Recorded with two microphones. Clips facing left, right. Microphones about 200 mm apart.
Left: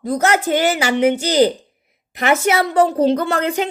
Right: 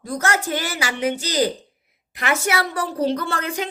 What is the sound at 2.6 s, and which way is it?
Speech, 20° left (ahead or behind).